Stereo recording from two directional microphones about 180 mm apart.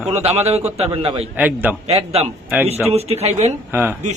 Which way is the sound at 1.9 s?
35° right (ahead or behind).